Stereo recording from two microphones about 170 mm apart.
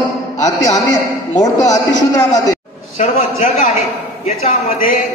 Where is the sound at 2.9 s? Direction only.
40° left (ahead or behind).